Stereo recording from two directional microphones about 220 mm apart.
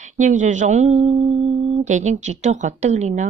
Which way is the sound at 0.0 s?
35° right (ahead or behind).